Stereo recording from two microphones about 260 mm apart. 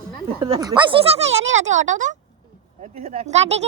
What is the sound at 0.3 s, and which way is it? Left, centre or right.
Speech, centre.